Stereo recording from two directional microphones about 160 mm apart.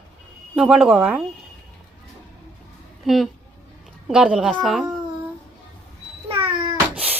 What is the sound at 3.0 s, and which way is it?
Speech, centre (ahead or behind).